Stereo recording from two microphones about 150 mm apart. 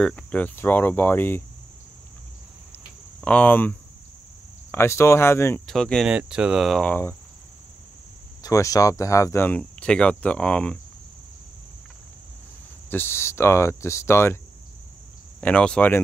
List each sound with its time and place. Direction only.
0.0 s speech: 10° left (ahead or behind)
3.2 s cricket: 10° left (ahead or behind)
4.6 s speech: 15° left (ahead or behind)
5.7 s speech: 5° left (ahead or behind)
8.4 s speech: 25° left (ahead or behind); by 10.8 s 5° left (ahead or behind)
12.9 s speech: 15° left (ahead or behind)
15.4 s speech: 5° left (ahead or behind)